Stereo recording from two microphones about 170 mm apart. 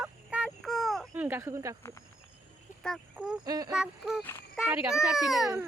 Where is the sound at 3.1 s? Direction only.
5° right (ahead or behind).